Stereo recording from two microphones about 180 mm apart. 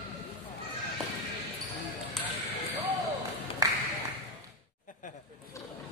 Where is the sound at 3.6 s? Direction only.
20° right (ahead or behind).